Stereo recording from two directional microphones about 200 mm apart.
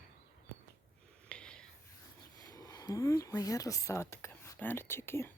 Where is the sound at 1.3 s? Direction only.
5° left (ahead or behind).